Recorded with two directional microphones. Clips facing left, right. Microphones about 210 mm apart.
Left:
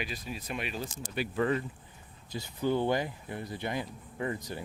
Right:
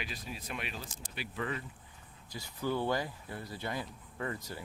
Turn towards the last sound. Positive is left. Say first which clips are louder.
# left 4 dB
turn(degrees=20)  # may be behind; listen again after turning